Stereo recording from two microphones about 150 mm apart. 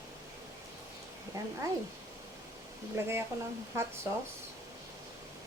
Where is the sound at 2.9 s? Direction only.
15° right (ahead or behind).